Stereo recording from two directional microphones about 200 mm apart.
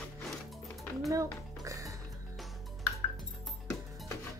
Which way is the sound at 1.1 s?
15° right (ahead or behind).